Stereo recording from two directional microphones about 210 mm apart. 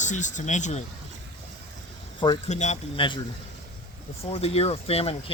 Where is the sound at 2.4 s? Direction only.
35° left (ahead or behind).